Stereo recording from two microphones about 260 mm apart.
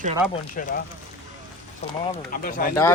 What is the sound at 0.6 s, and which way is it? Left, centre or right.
Speech, left.